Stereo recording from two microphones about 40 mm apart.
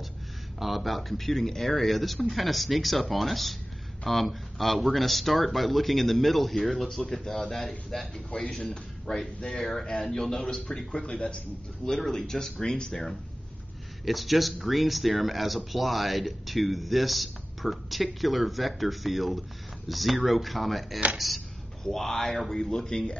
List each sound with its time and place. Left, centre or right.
0.6 s speech: centre
8.3 s speech: centre
9.0 s speech: centre
10.4 s a man's voice: left
11.9 s speech: centre
14.0 s speech: centre